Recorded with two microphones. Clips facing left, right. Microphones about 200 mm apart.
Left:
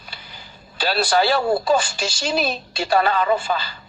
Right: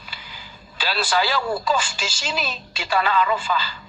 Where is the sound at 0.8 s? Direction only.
40° left (ahead or behind).